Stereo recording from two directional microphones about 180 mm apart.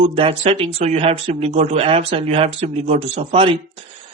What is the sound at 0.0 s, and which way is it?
Speech, 30° right (ahead or behind).